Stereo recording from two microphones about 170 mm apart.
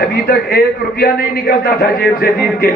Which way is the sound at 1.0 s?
65° left (ahead or behind).